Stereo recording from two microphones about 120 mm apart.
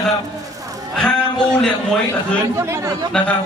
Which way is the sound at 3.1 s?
10° left (ahead or behind).